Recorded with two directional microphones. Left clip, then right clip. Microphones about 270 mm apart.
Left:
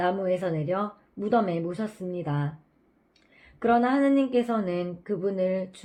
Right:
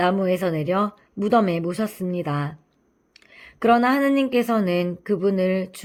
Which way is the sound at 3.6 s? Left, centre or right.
Right.